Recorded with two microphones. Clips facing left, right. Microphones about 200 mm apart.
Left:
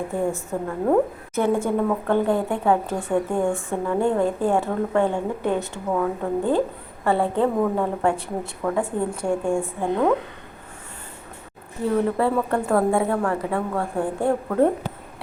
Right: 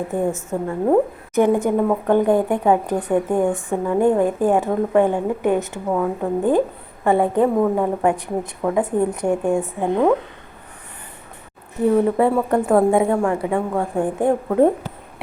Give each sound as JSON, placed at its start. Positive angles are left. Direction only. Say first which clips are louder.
{"t": 0.1, "sound": "a woman's voice", "louder": "right 3 dB", "side_deg": -20}
{"t": 11.9, "sound": "a woman's voice", "louder": "right 2 dB", "side_deg": -15}